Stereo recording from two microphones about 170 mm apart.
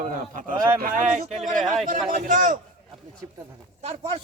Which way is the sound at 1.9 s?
50° right (ahead or behind).